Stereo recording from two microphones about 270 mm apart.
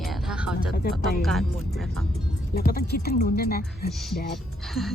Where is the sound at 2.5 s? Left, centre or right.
Left.